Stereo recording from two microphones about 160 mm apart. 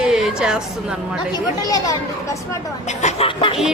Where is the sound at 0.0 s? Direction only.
5° right (ahead or behind).